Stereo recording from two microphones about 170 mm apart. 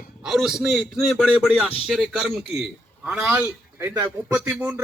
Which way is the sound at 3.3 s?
15° right (ahead or behind).